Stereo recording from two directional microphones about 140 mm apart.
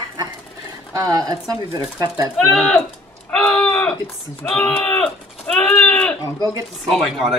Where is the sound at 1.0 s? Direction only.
25° right (ahead or behind).